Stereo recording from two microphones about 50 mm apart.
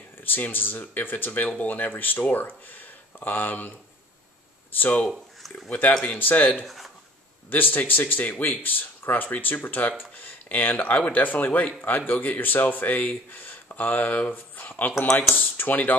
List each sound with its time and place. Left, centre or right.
0.2 s speech: left
4.7 s speech: left
6.6 s speech: centre
7.4 s speech: left